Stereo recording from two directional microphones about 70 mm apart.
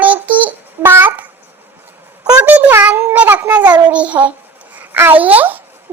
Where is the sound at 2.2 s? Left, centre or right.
Right.